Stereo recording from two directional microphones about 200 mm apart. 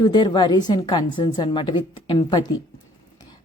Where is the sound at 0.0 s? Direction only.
20° left (ahead or behind).